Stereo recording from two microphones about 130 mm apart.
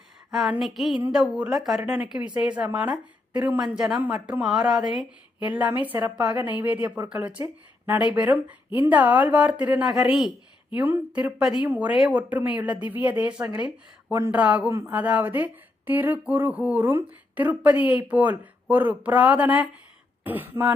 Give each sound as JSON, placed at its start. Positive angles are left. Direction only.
{"t": 0.3, "sound": "a woman's voice", "side_deg": -5}